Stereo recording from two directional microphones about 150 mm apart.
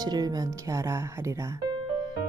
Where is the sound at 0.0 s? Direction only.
25° right (ahead or behind).